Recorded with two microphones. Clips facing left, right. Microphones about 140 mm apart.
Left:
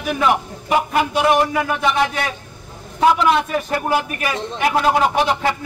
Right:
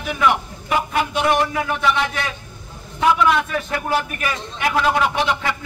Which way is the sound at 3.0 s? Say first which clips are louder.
Left 2 dB; 30° left (ahead or behind).